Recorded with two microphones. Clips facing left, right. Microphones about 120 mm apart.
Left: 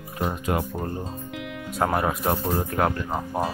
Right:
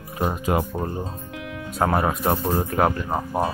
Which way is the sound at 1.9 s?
5° right (ahead or behind).